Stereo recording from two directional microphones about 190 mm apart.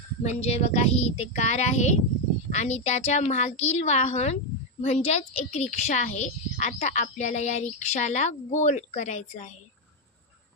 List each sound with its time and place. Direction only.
0.2 s speech: 35° left (ahead or behind)